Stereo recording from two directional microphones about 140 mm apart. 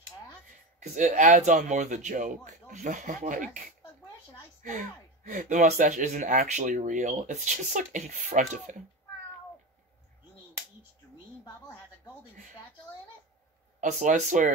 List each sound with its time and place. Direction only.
0.7 s speech: 65° right (ahead or behind)
4.6 s speech: 60° right (ahead or behind)
13.7 s speech: 60° right (ahead or behind)